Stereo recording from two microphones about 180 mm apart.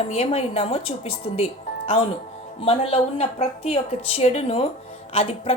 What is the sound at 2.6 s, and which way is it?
A woman's voice, 30° left (ahead or behind).